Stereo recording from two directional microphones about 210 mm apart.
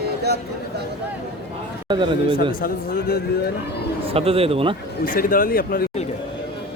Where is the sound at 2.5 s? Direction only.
45° left (ahead or behind).